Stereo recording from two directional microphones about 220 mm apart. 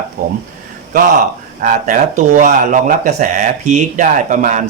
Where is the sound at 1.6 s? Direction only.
35° right (ahead or behind).